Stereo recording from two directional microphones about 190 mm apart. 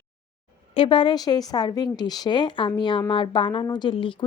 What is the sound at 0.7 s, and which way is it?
Speech, 25° left (ahead or behind).